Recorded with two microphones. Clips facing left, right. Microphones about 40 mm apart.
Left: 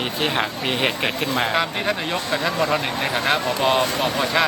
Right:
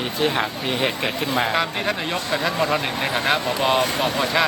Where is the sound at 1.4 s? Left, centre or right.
Centre.